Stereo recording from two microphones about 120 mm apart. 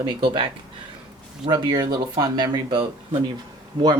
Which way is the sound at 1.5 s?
35° right (ahead or behind).